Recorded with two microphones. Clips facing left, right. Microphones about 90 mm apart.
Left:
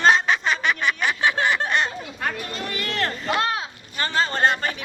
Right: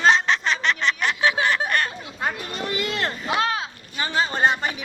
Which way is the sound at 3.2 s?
Centre (ahead or behind).